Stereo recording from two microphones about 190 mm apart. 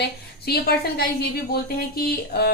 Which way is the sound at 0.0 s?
55° left (ahead or behind).